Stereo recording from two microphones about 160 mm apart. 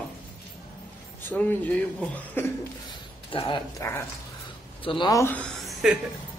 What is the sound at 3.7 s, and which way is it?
Speech, 15° left (ahead or behind).